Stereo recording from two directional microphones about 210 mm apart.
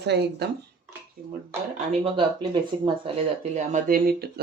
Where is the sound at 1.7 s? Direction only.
30° right (ahead or behind).